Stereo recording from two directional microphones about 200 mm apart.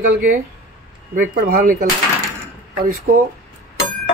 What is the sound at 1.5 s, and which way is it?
Speech, 45° right (ahead or behind).